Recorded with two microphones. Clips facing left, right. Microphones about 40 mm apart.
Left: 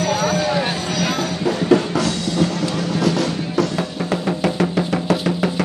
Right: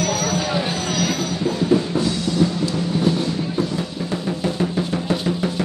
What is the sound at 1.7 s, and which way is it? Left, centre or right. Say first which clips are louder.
Music: left 4 dB; left.